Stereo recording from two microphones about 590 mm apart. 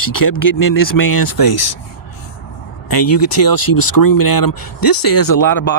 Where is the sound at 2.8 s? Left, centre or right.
Left.